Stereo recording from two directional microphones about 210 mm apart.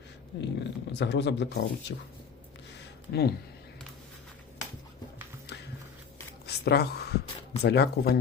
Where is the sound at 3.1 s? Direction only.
50° left (ahead or behind).